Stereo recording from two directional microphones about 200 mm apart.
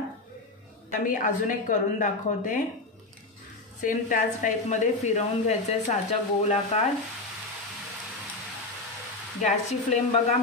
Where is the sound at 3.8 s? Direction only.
40° left (ahead or behind).